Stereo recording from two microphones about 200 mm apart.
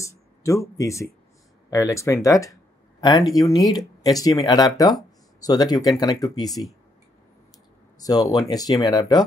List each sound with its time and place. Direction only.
0.0 s a sound: 15° left (ahead or behind)
1.7 s speech: 15° left (ahead or behind)
8.0 s speech: 20° left (ahead or behind)